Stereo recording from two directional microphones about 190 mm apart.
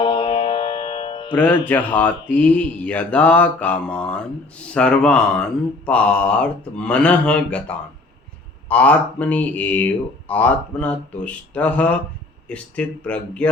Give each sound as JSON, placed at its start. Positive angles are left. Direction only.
{"t": 0.0, "sound": "music", "side_deg": 25}
{"t": 1.6, "sound": "speech", "side_deg": 10}